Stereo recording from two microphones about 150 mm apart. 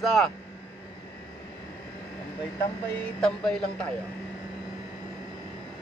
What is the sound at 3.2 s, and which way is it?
Speech, 5° left (ahead or behind).